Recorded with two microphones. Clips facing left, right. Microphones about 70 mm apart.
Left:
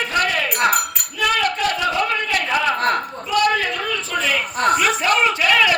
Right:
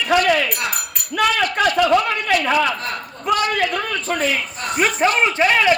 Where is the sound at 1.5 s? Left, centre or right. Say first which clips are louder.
Right 5 dB; right.